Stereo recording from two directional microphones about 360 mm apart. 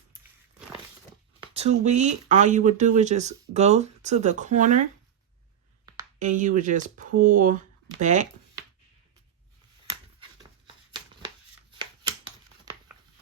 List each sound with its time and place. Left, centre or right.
1.4 s speech: centre